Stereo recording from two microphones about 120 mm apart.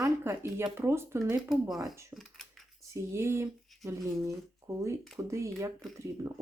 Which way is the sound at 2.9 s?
20° right (ahead or behind).